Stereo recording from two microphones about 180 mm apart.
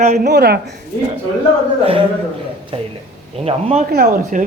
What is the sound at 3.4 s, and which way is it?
Speech, 35° right (ahead or behind).